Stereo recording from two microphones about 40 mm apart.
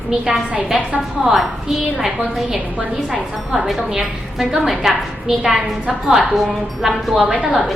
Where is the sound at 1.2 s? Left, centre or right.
Centre.